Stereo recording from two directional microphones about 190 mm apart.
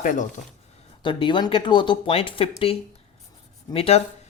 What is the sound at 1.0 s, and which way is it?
Speech, 25° left (ahead or behind).